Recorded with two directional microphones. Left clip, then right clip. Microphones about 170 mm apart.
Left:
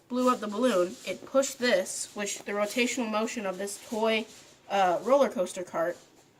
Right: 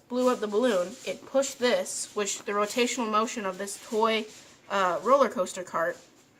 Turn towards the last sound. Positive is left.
turn(degrees=-35)  # may be behind; listen again after turning